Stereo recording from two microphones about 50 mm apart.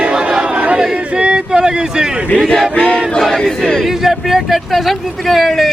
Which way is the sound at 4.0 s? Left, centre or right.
Centre.